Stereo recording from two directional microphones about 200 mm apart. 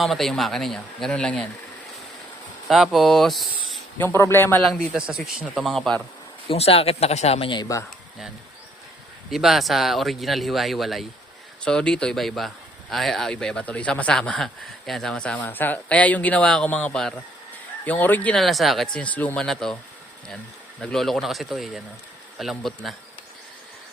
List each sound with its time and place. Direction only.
0.0 s speech: centre (ahead or behind)
2.6 s speech: centre (ahead or behind)
4.0 s a man's voice: 10° left (ahead or behind)
4.9 s speech: 5° right (ahead or behind)
6.5 s speech: 30° left (ahead or behind)
9.3 s speech: centre (ahead or behind)
20.8 s speech: centre (ahead or behind)